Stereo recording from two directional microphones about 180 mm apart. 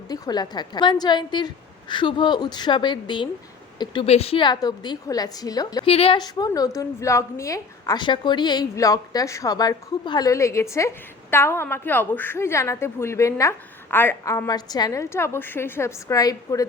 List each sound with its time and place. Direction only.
0.1 s a woman's voice: 25° left (ahead or behind)
5.9 s a woman's voice: 30° left (ahead or behind)